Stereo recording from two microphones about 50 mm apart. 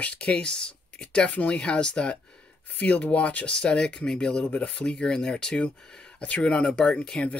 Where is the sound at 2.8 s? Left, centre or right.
Left.